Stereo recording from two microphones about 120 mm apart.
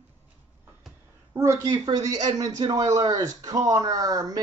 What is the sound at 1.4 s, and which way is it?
Speech, 30° right (ahead or behind).